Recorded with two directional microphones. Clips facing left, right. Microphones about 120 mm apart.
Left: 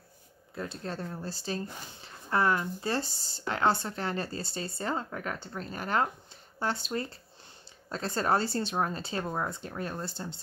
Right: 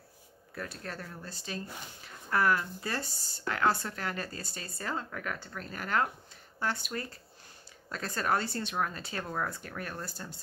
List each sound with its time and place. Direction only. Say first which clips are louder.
0.6 s speech: left 4 dB; 25° left (ahead or behind)